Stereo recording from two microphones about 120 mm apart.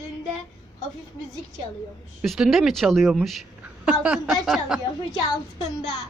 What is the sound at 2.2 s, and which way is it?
A woman's voice, centre (ahead or behind).